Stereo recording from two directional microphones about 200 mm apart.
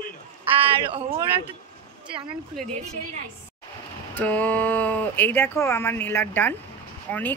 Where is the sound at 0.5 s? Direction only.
10° right (ahead or behind).